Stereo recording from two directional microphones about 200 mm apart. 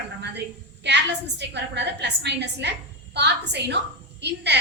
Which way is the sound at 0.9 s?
60° right (ahead or behind).